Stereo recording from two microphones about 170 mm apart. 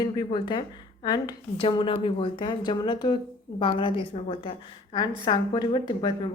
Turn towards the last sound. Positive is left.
turn(degrees=25)  # may be behind; listen again after turning